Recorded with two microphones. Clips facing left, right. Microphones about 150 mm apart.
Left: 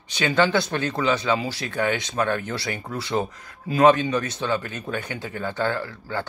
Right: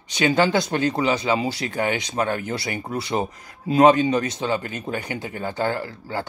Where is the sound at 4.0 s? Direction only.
15° right (ahead or behind).